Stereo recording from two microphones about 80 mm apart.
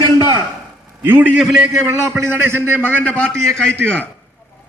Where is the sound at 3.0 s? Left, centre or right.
Centre.